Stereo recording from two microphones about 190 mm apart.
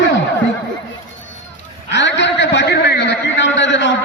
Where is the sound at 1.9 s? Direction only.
70° left (ahead or behind).